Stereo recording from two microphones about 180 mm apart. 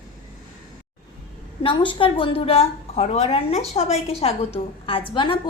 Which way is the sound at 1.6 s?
30° left (ahead or behind).